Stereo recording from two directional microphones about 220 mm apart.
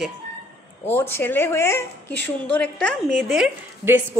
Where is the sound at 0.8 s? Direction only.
10° left (ahead or behind).